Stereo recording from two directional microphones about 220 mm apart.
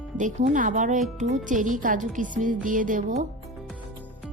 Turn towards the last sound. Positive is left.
turn(degrees=-35)  # may be behind; listen again after turning